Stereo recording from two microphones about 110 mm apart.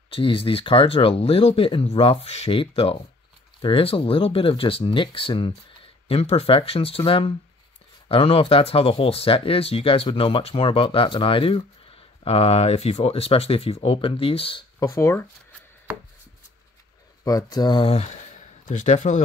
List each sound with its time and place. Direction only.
0.1 s speech: 55° left (ahead or behind)
14.8 s speech: 30° left (ahead or behind)
17.2 s speech: 35° left (ahead or behind)
17.9 s speech: 90° left